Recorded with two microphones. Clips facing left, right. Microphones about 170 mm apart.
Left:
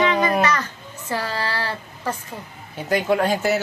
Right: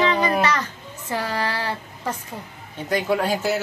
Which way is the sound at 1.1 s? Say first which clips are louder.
Even; 20° right (ahead or behind).